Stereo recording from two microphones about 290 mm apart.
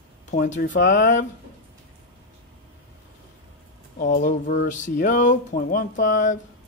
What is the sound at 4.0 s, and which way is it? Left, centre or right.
Speech, left.